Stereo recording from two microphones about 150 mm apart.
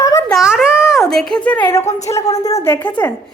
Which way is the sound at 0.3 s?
Centre (ahead or behind).